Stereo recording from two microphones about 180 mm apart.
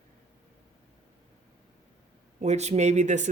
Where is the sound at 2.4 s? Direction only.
40° right (ahead or behind).